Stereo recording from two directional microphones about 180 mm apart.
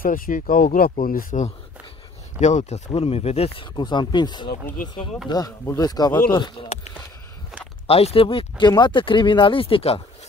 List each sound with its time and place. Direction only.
0.0 s speech: 50° left (ahead or behind); by 4.5 s 25° left (ahead or behind)
4.5 s speech: 55° left (ahead or behind)
4.8 s speech: 25° left (ahead or behind)
7.8 s speech: 35° left (ahead or behind)